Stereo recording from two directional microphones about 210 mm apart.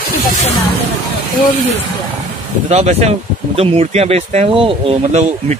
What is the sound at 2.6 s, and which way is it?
Speech, 30° right (ahead or behind).